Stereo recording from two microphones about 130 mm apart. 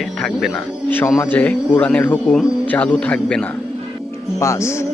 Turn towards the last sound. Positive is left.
turn(degrees=25)  # may be behind; listen again after turning